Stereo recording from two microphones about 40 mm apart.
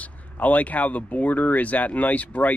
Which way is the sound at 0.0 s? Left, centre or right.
Left.